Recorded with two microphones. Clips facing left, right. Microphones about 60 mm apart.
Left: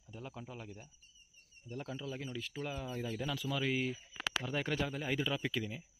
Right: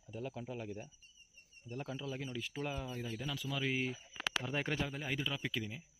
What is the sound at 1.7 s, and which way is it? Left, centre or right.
Speech, centre.